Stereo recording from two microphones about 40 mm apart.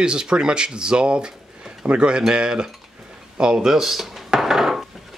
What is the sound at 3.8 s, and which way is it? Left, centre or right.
Speech, centre.